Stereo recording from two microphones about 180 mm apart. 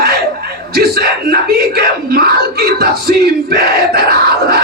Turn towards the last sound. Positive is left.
turn(degrees=-60)  # may be behind; listen again after turning